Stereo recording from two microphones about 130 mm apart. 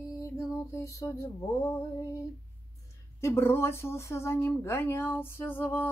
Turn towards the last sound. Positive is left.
turn(degrees=15)  # may be behind; listen again after turning